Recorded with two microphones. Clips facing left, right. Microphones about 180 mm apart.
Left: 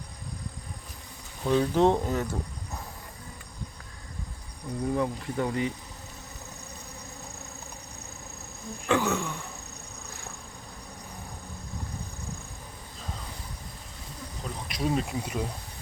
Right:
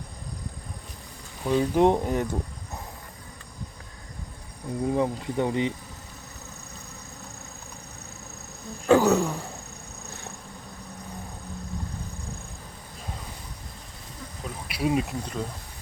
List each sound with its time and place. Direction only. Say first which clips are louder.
1.5 s speech: right 2 dB; 15° right (ahead or behind)
4.9 s speech: right 3 dB; 20° right (ahead or behind)
8.9 s a man's voice: right 7 dB; 40° right (ahead or behind)
14.4 s insect: right 3 dB; 10° right (ahead or behind)
15.1 s speech: even; 5° left (ahead or behind)